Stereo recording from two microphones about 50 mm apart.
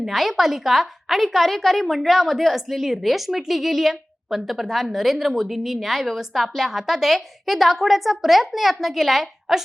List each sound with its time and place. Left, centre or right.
0.0 s a woman's voice: centre